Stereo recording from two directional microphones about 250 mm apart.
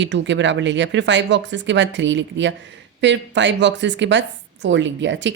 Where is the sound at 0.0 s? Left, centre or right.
Right.